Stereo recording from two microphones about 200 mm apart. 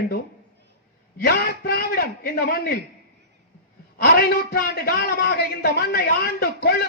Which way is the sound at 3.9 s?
55° left (ahead or behind).